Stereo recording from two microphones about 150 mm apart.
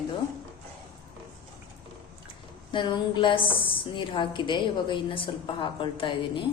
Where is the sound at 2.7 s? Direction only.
30° left (ahead or behind).